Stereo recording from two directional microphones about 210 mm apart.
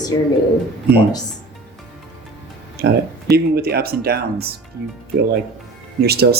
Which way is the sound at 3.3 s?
50° right (ahead or behind).